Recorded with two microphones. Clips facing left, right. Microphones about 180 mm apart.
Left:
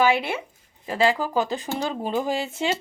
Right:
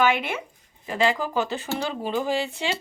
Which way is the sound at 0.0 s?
30° left (ahead or behind).